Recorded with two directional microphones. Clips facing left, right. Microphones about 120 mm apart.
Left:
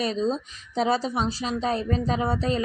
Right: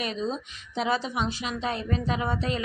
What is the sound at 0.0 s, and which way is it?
A woman's voice, 35° left (ahead or behind).